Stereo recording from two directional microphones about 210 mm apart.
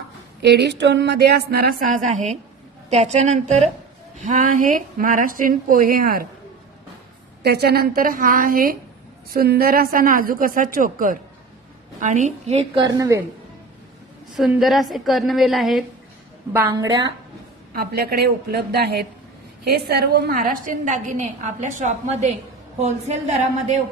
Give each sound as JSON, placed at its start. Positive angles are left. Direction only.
{"t": 0.4, "sound": "a woman's voice", "side_deg": -55}
{"t": 7.4, "sound": "a woman's voice", "side_deg": -50}
{"t": 12.7, "sound": "a woman's voice", "side_deg": -15}
{"t": 14.3, "sound": "a woman's voice", "side_deg": 0}
{"t": 16.5, "sound": "a woman's voice", "side_deg": -15}
{"t": 17.7, "sound": "a woman's voice", "side_deg": -45}